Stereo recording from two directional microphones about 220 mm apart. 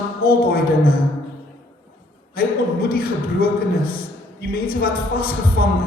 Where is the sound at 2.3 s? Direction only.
45° left (ahead or behind).